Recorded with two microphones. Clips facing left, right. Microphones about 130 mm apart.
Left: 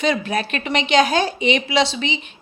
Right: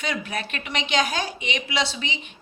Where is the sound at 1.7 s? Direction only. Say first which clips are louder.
Left 8 dB; 80° left.